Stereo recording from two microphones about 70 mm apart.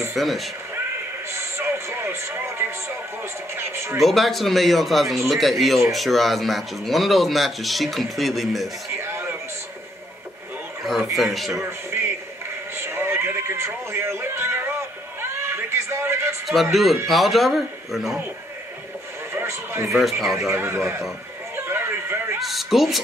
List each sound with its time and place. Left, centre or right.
0.1 s speech: centre
1.3 s a sound: right
3.5 s speech: right
4.0 s speech: centre
8.9 s a sound: right
11.1 s speech: centre
12.7 s a sound: right
16.7 s speech: centre
19.4 s a man's voice: right
20.0 s speech: centre
20.5 s speech: right
21.5 s music: right
22.4 s speech: centre